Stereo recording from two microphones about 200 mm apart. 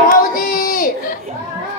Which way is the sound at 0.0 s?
45° left (ahead or behind).